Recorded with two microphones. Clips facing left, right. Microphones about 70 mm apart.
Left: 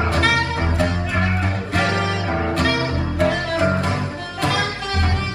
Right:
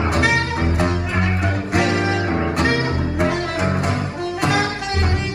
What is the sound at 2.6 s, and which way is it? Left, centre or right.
Music, right.